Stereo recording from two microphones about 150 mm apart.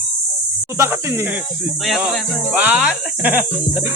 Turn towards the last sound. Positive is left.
turn(degrees=-5)  # may be behind; listen again after turning